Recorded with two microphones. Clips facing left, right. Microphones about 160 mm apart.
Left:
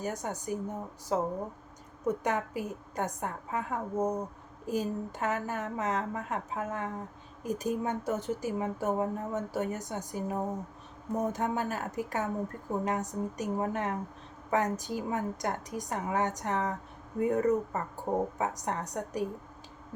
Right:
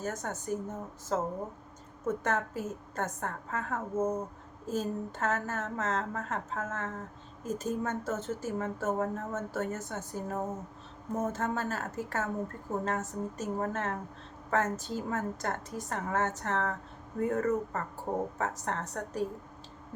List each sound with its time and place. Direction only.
0.0 s a woman's voice: 15° left (ahead or behind)